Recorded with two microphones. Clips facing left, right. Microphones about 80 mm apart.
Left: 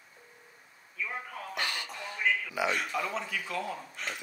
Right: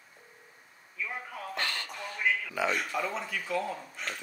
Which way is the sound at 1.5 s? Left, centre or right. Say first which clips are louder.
Even; centre.